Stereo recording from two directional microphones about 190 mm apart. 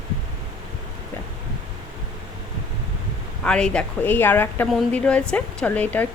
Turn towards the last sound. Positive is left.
turn(degrees=10)  # may be behind; listen again after turning